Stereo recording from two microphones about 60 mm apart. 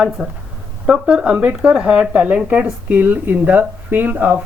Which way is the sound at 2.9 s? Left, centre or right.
Right.